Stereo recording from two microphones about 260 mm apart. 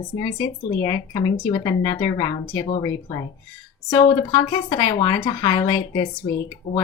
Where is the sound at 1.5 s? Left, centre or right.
Centre.